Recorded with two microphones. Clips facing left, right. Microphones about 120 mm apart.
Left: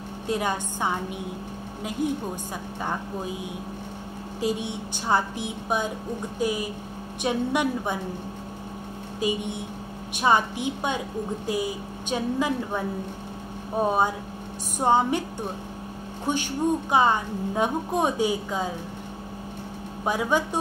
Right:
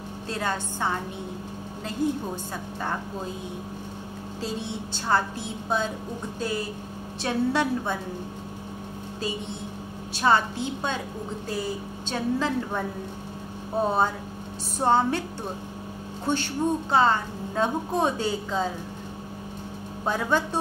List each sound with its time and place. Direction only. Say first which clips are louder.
0.3 s a woman's voice: left 3 dB; 15° left (ahead or behind)
4.4 s a woman's voice: left 5 dB; 15° left (ahead or behind)
9.2 s a woman's voice: left 5 dB; 15° left (ahead or behind)
13.8 s a woman's voice: left 1 dB; 15° left (ahead or behind)
16.3 s a woman's voice: left 1 dB; 15° left (ahead or behind)
20.1 s a woman's voice: left 1 dB; 10° left (ahead or behind)